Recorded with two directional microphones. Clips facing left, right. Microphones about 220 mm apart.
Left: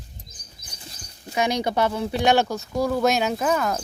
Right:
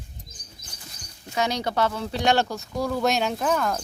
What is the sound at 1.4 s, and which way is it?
Speech, 15° left (ahead or behind).